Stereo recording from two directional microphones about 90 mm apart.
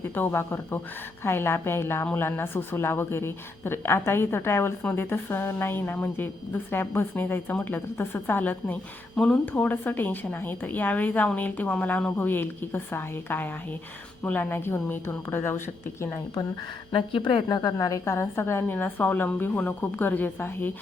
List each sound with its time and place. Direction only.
0.1 s a woman's voice: 25° left (ahead or behind)
16.9 s a woman's voice: 75° left (ahead or behind)
17.5 s a woman's voice: 45° left (ahead or behind); by 20.7 s 20° left (ahead or behind)